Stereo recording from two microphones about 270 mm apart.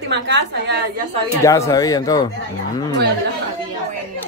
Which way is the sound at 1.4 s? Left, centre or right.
Centre.